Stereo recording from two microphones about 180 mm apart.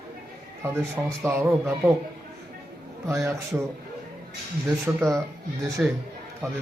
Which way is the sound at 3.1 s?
15° right (ahead or behind).